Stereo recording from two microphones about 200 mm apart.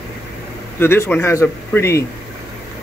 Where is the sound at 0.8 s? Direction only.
10° left (ahead or behind).